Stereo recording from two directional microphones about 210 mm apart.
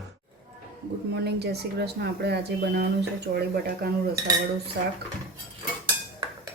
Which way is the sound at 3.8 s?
45° right (ahead or behind).